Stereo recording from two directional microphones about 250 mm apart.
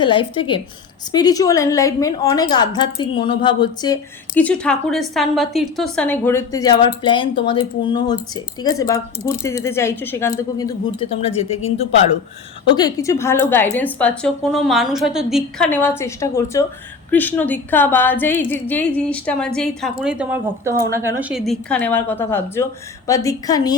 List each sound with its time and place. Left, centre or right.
0.0 s a woman's voice: centre
12.6 s a woman's voice: centre